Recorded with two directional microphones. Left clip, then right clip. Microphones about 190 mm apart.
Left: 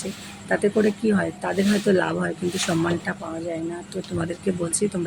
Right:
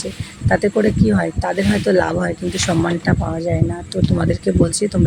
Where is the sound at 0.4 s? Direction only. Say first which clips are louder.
Right 5 dB; 30° right (ahead or behind).